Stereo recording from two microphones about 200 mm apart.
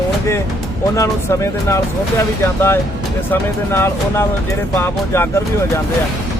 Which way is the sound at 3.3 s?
10° left (ahead or behind).